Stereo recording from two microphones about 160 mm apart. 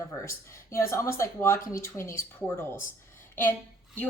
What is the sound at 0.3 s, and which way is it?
A woman's voice, 15° left (ahead or behind).